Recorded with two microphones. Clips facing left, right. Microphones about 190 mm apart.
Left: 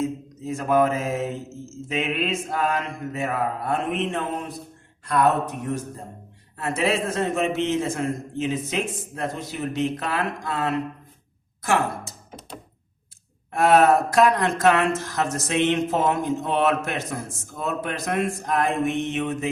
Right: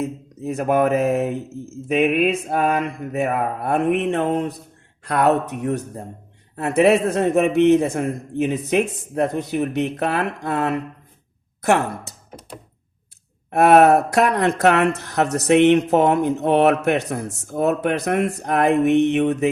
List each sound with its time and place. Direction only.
0.0 s speech: 65° right (ahead or behind)
13.5 s speech: 65° right (ahead or behind)